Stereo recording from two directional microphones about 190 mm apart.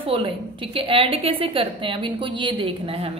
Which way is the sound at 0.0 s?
30° right (ahead or behind).